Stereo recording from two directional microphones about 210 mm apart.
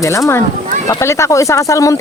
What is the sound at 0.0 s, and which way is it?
Speech, 15° left (ahead or behind).